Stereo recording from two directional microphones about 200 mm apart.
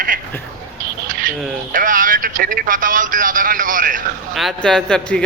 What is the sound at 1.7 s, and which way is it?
Speech, 45° right (ahead or behind).